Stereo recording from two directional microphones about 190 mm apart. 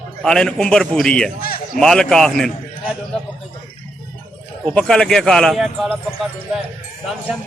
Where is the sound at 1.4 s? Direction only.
50° left (ahead or behind).